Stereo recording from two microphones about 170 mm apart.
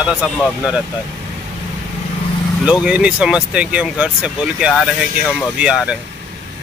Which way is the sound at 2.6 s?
5° right (ahead or behind).